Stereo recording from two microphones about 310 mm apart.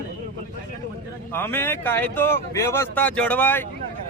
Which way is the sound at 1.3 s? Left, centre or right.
Centre.